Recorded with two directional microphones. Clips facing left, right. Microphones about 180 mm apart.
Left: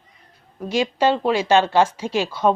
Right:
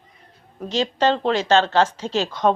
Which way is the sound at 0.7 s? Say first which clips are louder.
Left 1 dB; 10° left (ahead or behind).